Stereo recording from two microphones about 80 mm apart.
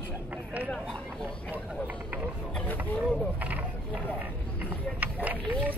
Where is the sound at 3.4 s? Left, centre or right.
Centre.